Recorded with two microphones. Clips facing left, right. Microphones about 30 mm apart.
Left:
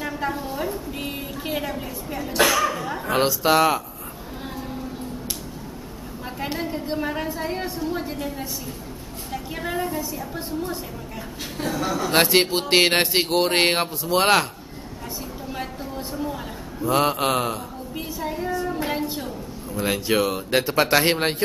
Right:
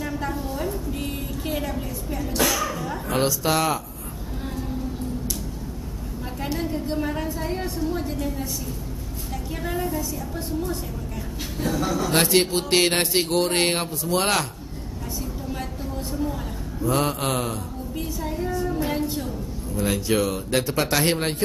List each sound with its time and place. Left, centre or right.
0.0 s a sound: left
6.5 s a woman's voice: centre
11.6 s speech: centre
16.1 s speech: centre